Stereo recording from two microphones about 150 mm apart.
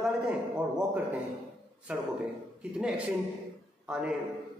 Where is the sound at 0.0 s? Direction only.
5° right (ahead or behind).